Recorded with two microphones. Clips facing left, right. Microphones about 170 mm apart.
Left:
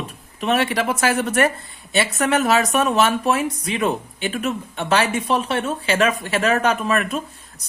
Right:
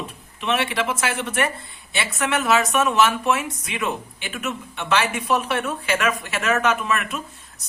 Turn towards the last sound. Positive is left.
turn(degrees=35)  # may be behind; listen again after turning